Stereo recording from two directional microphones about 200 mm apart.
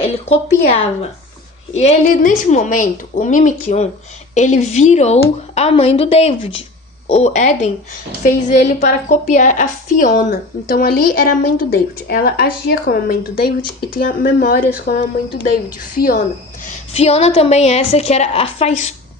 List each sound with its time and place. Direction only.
1.7 s a woman's voice: 35° left (ahead or behind)
16.9 s a woman's voice: 30° left (ahead or behind)